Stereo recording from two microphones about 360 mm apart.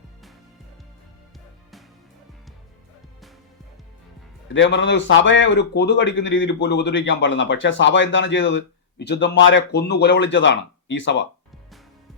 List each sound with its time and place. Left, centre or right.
4.5 s speech: left